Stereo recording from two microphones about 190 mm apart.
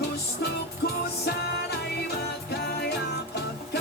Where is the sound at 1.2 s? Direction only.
60° left (ahead or behind).